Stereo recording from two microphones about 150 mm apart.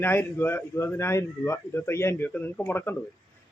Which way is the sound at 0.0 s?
15° left (ahead or behind).